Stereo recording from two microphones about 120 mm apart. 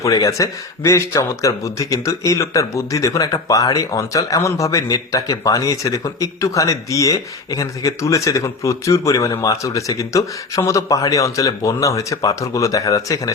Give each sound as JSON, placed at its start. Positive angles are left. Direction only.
{"t": 0.0, "sound": "speech", "side_deg": 25}